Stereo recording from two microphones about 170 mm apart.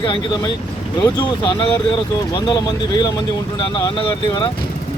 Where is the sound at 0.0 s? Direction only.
30° left (ahead or behind).